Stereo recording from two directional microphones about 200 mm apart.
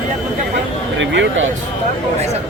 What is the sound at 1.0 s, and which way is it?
Speech, 70° right (ahead or behind).